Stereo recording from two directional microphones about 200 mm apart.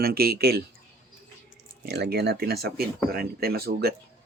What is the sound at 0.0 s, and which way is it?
Speech, 50° right (ahead or behind).